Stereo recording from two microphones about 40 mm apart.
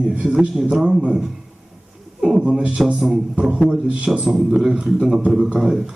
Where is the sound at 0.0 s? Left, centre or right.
Centre.